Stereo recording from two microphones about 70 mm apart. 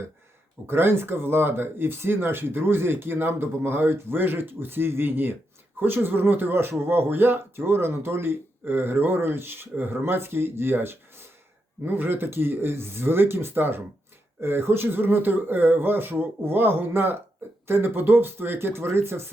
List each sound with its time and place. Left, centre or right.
0.7 s speech: right